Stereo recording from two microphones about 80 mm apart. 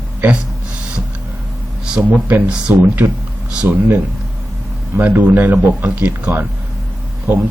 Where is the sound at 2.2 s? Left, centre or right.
Centre.